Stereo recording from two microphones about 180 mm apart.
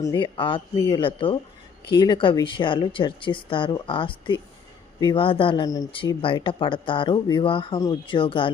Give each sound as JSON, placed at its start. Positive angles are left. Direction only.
{"t": 0.0, "sound": "speech", "side_deg": 25}